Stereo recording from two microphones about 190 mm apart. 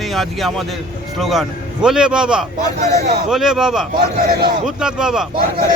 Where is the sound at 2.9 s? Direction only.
40° right (ahead or behind).